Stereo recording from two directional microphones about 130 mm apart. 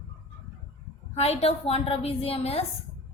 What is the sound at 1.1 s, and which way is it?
A woman's voice, 50° left (ahead or behind).